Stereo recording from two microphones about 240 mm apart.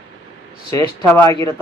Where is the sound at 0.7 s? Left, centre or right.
Right.